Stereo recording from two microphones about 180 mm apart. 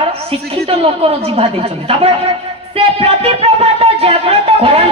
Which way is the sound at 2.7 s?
35° right (ahead or behind).